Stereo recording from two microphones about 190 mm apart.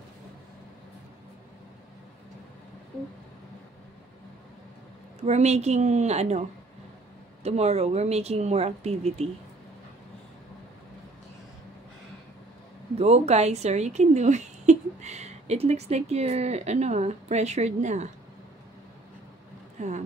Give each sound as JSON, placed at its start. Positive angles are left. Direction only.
{"t": 5.2, "sound": "speech", "side_deg": -35}
{"t": 7.4, "sound": "speech", "side_deg": -35}
{"t": 12.9, "sound": "speech", "side_deg": -35}
{"t": 19.8, "sound": "speech", "side_deg": -40}